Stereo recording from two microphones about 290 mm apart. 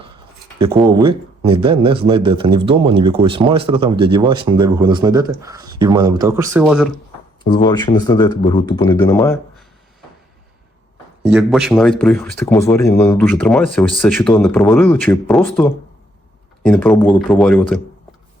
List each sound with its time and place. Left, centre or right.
0.9 s speech: centre
7.4 s speech: centre
11.2 s speech: centre